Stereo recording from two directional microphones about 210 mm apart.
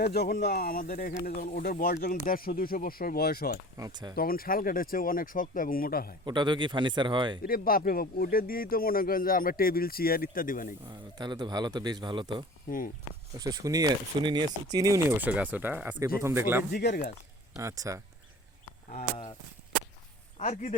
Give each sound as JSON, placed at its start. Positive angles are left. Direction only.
{"t": 0.0, "sound": "speech", "side_deg": 50}
{"t": 3.8, "sound": "speech", "side_deg": -20}
{"t": 4.1, "sound": "speech", "side_deg": 45}
{"t": 6.2, "sound": "speech", "side_deg": -20}
{"t": 7.4, "sound": "speech", "side_deg": 45}
{"t": 10.8, "sound": "speech", "side_deg": -20}
{"t": 12.6, "sound": "speech", "side_deg": 40}
{"t": 13.4, "sound": "speech", "side_deg": -15}
{"t": 16.7, "sound": "speech", "side_deg": 45}
{"t": 17.6, "sound": "speech", "side_deg": -15}
{"t": 18.9, "sound": "speech", "side_deg": 30}
{"t": 20.4, "sound": "speech", "side_deg": 35}